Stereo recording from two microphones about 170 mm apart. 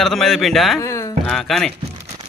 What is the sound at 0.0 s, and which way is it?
Speech, centre (ahead or behind).